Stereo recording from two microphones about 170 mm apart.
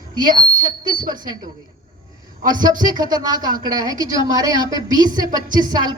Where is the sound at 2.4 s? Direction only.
50° right (ahead or behind).